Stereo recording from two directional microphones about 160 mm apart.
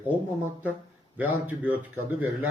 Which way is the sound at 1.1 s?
10° right (ahead or behind).